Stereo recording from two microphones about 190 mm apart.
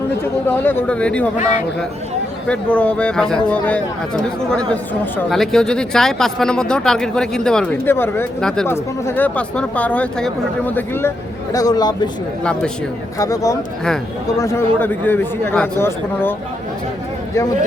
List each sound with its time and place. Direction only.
0.4 s speech: 10° left (ahead or behind)
2.5 s speech: 5° left (ahead or behind)
13.1 s speech: 15° left (ahead or behind)